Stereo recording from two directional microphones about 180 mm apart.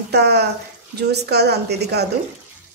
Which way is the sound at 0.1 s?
65° right (ahead or behind).